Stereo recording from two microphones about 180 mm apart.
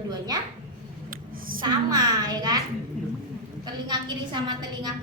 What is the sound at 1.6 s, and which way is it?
A woman's voice, 20° right (ahead or behind).